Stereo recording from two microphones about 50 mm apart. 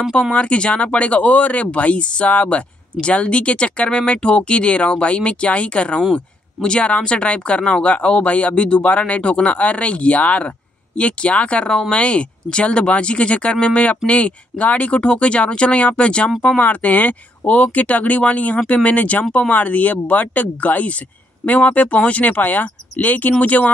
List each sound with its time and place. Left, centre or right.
0.1 s speech: left
16.5 s speech: left